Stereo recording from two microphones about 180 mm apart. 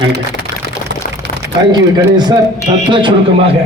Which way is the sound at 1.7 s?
25° right (ahead or behind).